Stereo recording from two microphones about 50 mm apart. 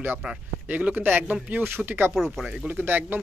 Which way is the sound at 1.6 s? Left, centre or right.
Right.